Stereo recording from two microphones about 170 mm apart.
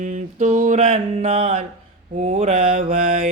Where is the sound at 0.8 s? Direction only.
35° right (ahead or behind).